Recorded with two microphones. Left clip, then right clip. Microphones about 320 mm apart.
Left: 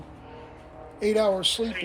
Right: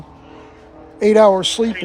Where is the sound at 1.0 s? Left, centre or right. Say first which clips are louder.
Right 12 dB; centre.